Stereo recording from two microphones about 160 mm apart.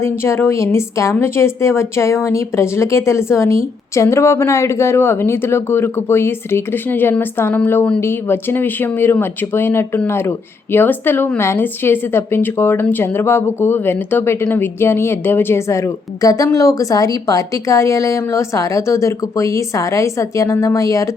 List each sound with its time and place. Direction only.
0.0 s speech: 15° left (ahead or behind)